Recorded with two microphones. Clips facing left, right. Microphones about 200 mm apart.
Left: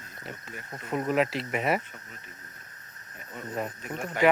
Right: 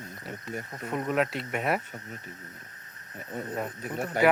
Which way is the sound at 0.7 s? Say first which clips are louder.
Left 3 dB; centre (ahead or behind).